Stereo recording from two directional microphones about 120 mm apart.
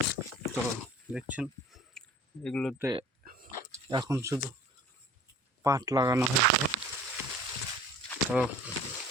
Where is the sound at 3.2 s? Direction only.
90° right.